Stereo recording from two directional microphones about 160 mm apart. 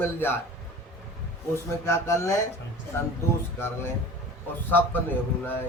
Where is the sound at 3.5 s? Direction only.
15° left (ahead or behind).